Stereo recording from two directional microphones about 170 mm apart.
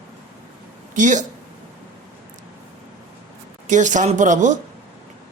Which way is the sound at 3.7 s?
45° right (ahead or behind).